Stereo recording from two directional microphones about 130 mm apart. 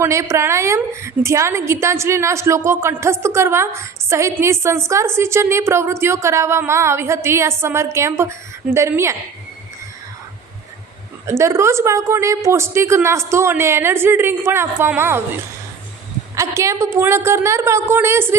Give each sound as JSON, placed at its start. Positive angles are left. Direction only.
{"t": 0.0, "sound": "a woman's voice", "side_deg": -20}
{"t": 11.3, "sound": "a woman's voice", "side_deg": -20}